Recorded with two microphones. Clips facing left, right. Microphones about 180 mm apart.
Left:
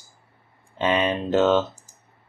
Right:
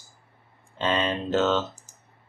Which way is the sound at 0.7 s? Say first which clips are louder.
Left 3 dB; 15° left (ahead or behind).